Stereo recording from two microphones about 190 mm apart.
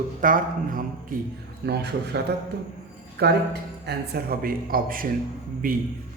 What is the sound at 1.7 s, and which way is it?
A man's voice, 60° right (ahead or behind).